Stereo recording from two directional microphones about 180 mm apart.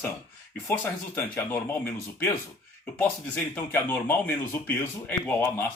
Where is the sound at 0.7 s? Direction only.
10° left (ahead or behind).